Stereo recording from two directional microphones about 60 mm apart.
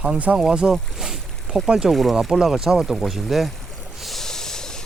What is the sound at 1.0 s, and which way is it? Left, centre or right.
Boat, centre.